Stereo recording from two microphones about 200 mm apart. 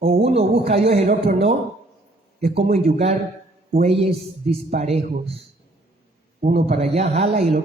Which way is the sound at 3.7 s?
30° right (ahead or behind).